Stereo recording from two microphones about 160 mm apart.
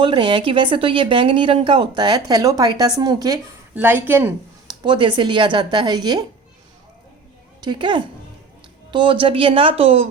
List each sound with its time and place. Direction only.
0.0 s a woman's voice: 30° right (ahead or behind); by 4.4 s 15° right (ahead or behind)
4.7 s speech: 30° right (ahead or behind)
7.6 s speech: 30° right (ahead or behind)